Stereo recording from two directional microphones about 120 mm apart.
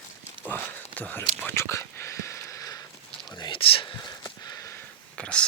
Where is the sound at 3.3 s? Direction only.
45° left (ahead or behind); by 4.8 s 25° left (ahead or behind).